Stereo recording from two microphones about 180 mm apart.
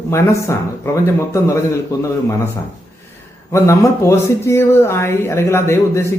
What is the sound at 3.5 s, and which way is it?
A man's voice, 15° left (ahead or behind).